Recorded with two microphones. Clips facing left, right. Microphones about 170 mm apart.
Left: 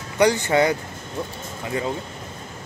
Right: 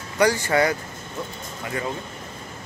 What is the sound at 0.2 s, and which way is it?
Speech, 20° left (ahead or behind).